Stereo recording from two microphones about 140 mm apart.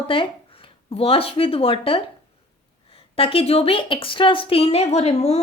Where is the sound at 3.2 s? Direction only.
40° left (ahead or behind).